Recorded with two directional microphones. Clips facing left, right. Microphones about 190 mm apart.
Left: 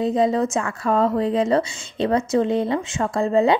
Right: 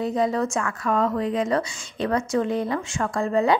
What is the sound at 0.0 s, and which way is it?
A woman's voice, 25° left (ahead or behind).